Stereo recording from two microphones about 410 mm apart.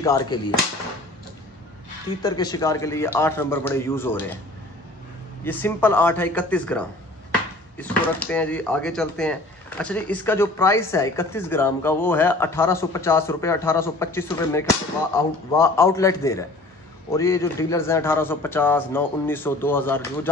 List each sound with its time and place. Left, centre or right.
0.0 s a man's voice: centre
2.2 s a man's voice: centre
5.4 s a man's voice: centre